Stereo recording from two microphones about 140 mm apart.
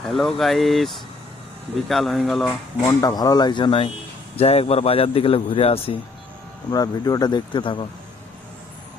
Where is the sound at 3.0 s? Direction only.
25° left (ahead or behind); by 6.0 s 45° left (ahead or behind).